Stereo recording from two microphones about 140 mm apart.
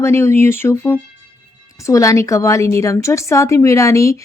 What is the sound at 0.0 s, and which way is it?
Speech, 20° left (ahead or behind).